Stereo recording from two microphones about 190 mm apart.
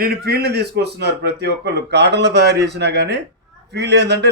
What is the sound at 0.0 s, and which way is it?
A man's voice, 55° right (ahead or behind).